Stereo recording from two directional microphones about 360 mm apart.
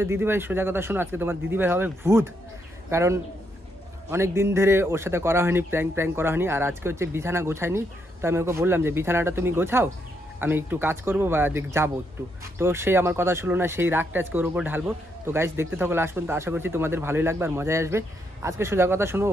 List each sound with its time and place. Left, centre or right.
0.0 s speech: centre